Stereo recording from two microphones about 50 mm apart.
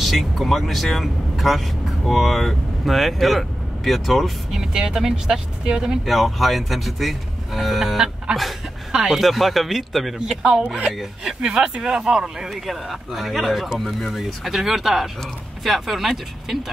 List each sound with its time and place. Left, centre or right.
0.0 s speech: centre
4.5 s speech: centre
6.0 s speech: centre
8.3 s speech: centre
9.1 s speech: centre
11.4 s speech: centre